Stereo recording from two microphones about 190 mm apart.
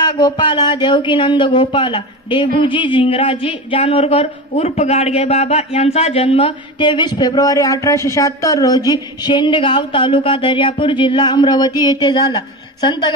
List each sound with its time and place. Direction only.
0.0 s speech: 25° left (ahead or behind)